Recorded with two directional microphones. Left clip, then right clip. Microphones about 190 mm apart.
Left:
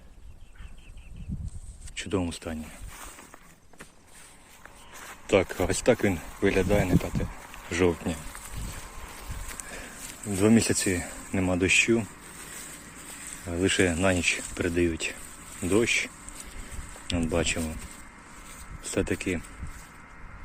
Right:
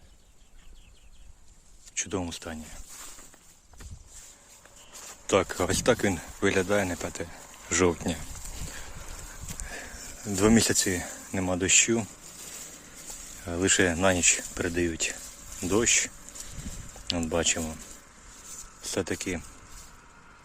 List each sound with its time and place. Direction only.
2.0 s speech: centre (ahead or behind)
5.2 s speech: 20° right (ahead or behind)
10.3 s speech: 20° right (ahead or behind)
13.4 s speech: 20° right (ahead or behind)
18.8 s speech: 10° right (ahead or behind)